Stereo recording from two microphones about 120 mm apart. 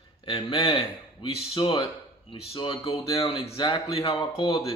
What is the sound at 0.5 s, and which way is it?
Speech, 45° left (ahead or behind).